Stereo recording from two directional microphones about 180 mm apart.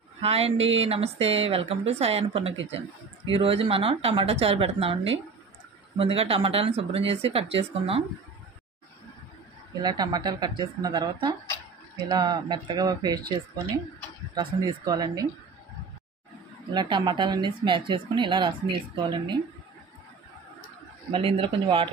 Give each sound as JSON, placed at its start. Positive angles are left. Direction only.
{"t": 0.2, "sound": "speech", "side_deg": -35}
{"t": 9.8, "sound": "speech", "side_deg": -25}
{"t": 14.3, "sound": "speech", "side_deg": -25}
{"t": 16.7, "sound": "speech", "side_deg": -25}
{"t": 21.1, "sound": "speech", "side_deg": -30}